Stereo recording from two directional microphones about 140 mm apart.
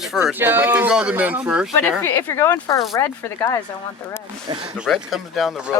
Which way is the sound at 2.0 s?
15° left (ahead or behind).